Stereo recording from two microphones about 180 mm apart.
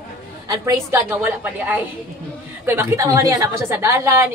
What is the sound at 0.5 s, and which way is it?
A woman's voice, 15° right (ahead or behind).